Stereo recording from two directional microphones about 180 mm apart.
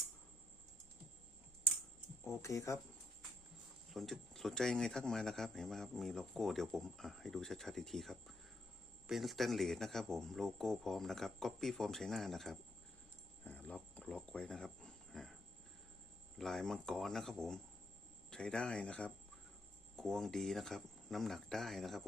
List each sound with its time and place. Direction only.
2.2 s speech: 15° left (ahead or behind)
3.9 s speech: centre (ahead or behind)
13.4 s a sound: 10° left (ahead or behind)
16.4 s speech: centre (ahead or behind)